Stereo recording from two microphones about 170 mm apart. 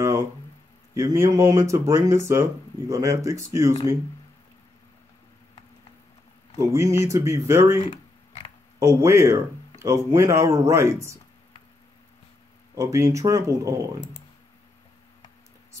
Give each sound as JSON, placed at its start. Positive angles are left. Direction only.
{"t": 0.9, "sound": "speech", "side_deg": -15}
{"t": 6.6, "sound": "speech", "side_deg": -15}
{"t": 7.9, "sound": "a sound", "side_deg": 30}
{"t": 8.7, "sound": "speech", "side_deg": -15}
{"t": 12.7, "sound": "speech", "side_deg": -15}